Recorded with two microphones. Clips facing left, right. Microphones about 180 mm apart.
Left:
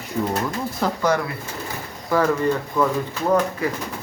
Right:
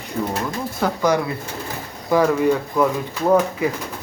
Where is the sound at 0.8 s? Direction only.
5° right (ahead or behind).